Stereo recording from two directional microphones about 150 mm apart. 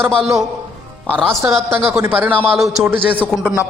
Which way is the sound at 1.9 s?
15° right (ahead or behind).